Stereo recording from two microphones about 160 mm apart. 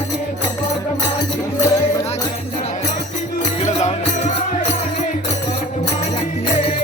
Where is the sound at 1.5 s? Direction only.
20° left (ahead or behind).